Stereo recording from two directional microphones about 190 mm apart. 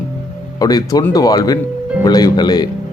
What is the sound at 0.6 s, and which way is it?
Speech, 20° left (ahead or behind).